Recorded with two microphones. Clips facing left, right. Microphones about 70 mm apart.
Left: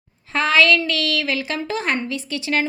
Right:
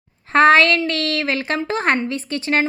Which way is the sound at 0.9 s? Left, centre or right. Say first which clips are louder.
Right 1 dB; right.